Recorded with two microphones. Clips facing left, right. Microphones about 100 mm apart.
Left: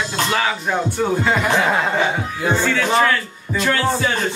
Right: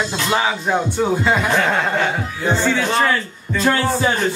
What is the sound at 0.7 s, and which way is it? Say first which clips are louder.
Speech: right 2 dB; 10° right (ahead or behind).